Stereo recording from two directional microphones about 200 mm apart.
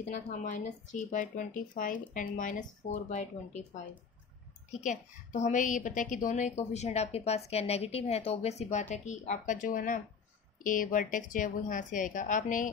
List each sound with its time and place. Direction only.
0.1 s a woman's voice: 40° left (ahead or behind)